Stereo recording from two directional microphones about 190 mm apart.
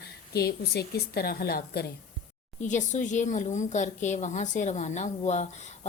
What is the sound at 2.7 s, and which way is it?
A woman's voice, 40° left (ahead or behind).